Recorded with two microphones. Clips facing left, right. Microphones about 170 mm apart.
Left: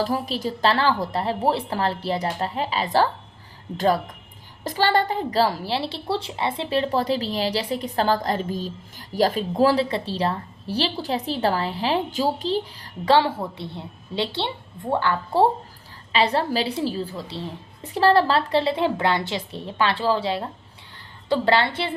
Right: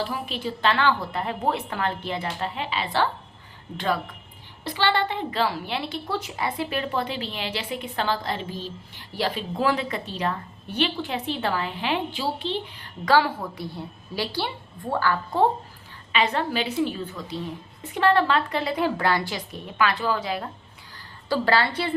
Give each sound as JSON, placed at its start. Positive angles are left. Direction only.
{"t": 0.0, "sound": "a woman's voice", "side_deg": 40}